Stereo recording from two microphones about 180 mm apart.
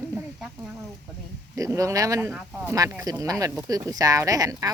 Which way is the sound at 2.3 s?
Centre (ahead or behind).